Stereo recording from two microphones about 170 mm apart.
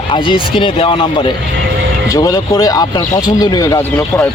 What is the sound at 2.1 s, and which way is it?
Speech, 20° left (ahead or behind).